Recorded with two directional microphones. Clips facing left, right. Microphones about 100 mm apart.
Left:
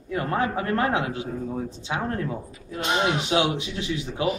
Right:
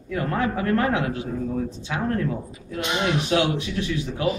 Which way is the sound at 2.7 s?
35° left (ahead or behind).